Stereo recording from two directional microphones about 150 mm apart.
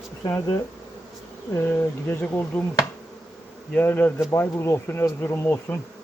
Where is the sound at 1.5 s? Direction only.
15° left (ahead or behind).